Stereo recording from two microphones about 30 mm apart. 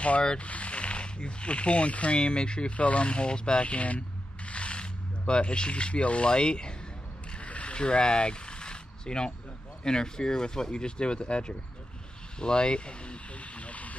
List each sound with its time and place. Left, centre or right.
0.4 s speech: left
2.2 s speech: left
2.8 s speech: left
3.1 s speech: left
3.6 s speech: left
4.5 s zipper: left
6.3 s speech: left
7.3 s mechanisms: left
7.7 s a sound: left
9.8 s speech: left
12.4 s a sound: left